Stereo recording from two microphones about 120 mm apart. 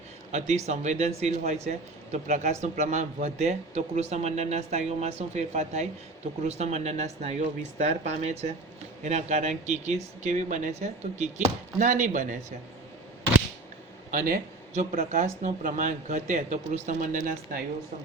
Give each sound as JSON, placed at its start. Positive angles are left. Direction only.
{"t": 0.3, "sound": "speech", "side_deg": -70}
{"t": 1.6, "sound": "speech", "side_deg": -80}
{"t": 9.0, "sound": "speech", "side_deg": -75}
{"t": 14.7, "sound": "speech", "side_deg": -90}